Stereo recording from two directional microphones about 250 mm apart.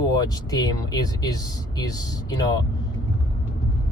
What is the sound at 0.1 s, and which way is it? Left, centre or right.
Speech, centre.